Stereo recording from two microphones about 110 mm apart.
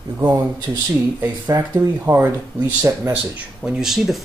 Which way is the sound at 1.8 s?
20° right (ahead or behind).